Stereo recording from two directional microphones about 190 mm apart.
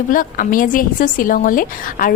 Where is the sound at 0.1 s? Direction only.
45° left (ahead or behind).